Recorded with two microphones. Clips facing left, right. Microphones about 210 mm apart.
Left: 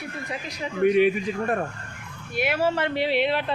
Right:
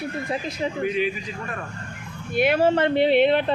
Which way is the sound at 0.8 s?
60° left (ahead or behind).